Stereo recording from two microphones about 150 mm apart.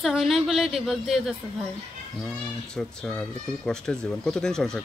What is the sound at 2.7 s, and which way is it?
Speech, 5° left (ahead or behind).